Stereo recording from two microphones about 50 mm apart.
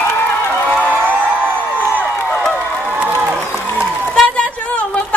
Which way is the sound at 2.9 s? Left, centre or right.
Right.